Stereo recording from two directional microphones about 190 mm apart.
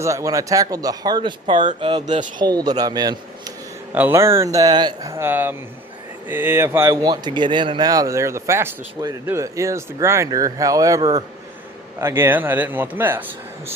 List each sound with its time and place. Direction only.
0.0 s speech: 15° right (ahead or behind)